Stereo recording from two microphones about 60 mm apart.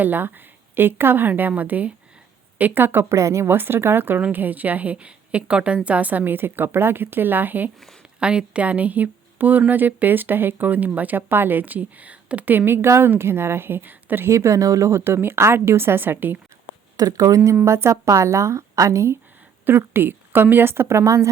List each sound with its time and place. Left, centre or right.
0.0 s a woman's voice: right
3.5 s a woman's voice: right
8.2 s a woman's voice: centre; by 14.3 s right
14.3 s a woman's voice: right
17.0 s a woman's voice: right
19.9 s a woman's voice: right